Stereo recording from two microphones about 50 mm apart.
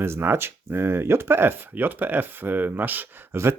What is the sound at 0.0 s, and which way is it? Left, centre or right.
Speech, right.